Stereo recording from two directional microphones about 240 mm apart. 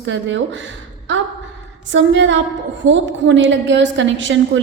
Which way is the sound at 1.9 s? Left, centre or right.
Right.